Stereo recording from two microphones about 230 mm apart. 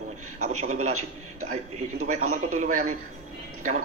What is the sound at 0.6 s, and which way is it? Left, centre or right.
A man's voice, right.